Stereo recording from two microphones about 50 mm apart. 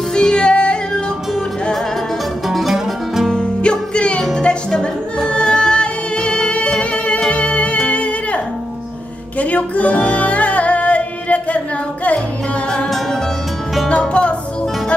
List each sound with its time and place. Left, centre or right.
0.1 s yodeling: centre
2.4 s music: centre
3.3 s music: centre
9.4 s music: left
13.8 s music: left